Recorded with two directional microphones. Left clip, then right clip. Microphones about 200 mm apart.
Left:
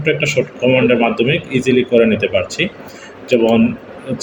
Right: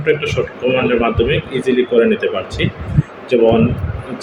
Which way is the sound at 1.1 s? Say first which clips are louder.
Even; 40° left (ahead or behind).